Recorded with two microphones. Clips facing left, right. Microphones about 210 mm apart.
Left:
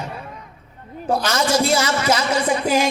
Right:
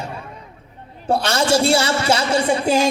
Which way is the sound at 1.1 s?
30° right (ahead or behind).